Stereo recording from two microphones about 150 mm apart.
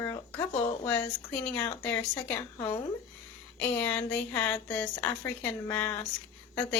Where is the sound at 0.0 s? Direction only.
20° left (ahead or behind).